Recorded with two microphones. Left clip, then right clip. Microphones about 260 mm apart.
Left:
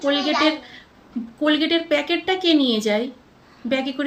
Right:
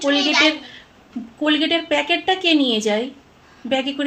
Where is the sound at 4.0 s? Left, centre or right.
Centre.